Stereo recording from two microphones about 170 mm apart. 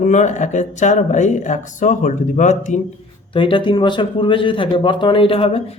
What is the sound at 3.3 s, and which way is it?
A man's voice, 30° left (ahead or behind).